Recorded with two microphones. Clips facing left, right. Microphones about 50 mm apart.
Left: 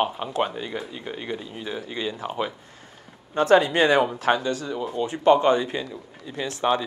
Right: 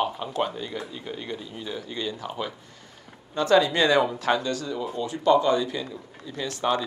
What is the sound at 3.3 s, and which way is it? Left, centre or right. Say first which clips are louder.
Speech: left 2 dB; left.